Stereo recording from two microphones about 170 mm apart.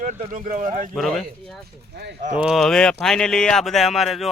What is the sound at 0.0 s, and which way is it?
Speech, 50° right (ahead or behind).